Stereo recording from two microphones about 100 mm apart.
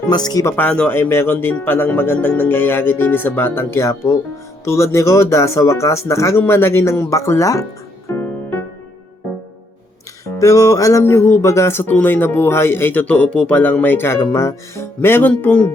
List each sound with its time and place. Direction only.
0.1 s speech: 45° left (ahead or behind)
0.5 s speech: 10° left (ahead or behind)
0.9 s speech: 25° left (ahead or behind)
8.2 s music: 25° left (ahead or behind)
10.3 s speech: 35° left (ahead or behind); by 15.7 s 15° left (ahead or behind)